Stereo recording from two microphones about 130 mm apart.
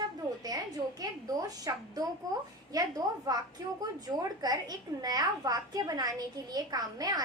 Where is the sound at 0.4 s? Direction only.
30° right (ahead or behind).